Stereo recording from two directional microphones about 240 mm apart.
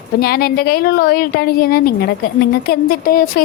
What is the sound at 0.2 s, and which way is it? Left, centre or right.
A woman's voice, left.